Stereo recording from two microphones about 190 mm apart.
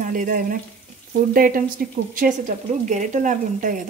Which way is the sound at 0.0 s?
45° right (ahead or behind).